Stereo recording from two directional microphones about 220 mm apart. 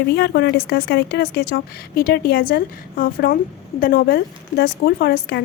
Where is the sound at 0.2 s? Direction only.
50° left (ahead or behind).